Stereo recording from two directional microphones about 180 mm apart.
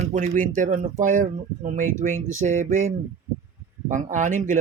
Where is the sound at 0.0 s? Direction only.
45° right (ahead or behind).